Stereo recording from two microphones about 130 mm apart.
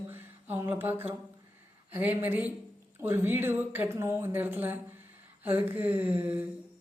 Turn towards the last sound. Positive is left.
turn(degrees=-15)  # may be behind; listen again after turning